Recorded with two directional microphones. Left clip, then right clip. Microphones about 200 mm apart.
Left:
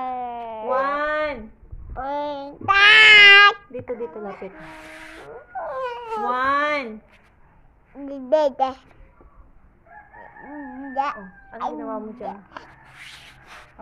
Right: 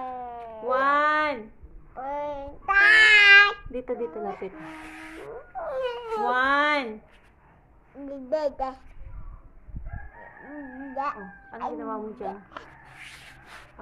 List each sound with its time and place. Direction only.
0.0 s a sound: 40° left (ahead or behind)
0.7 s a sound: 10° right (ahead or behind)
2.0 s child singing: 60° left (ahead or behind); by 3.5 s 40° left (ahead or behind)
3.9 s a woman's voice: centre (ahead or behind)
5.6 s a sound: 15° left (ahead or behind)
6.2 s speech: 5° right (ahead or behind)
8.0 s a child's voice: 40° left (ahead or behind)
10.9 s a child's voice: 40° left (ahead or behind)
11.8 s speech: 10° right (ahead or behind)
12.6 s rub: 20° left (ahead or behind)